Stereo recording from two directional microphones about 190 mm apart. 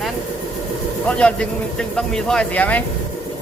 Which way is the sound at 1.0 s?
5° left (ahead or behind).